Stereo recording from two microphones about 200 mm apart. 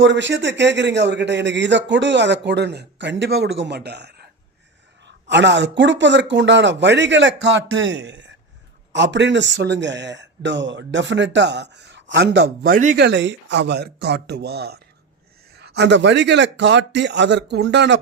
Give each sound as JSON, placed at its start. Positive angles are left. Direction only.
{"t": 0.0, "sound": "speech", "side_deg": -65}
{"t": 13.0, "sound": "speech", "side_deg": -60}